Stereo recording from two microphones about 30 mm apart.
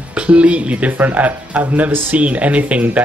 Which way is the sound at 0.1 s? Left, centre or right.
Right.